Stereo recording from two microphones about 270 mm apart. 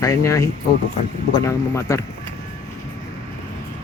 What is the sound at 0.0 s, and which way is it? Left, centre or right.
Speech, centre.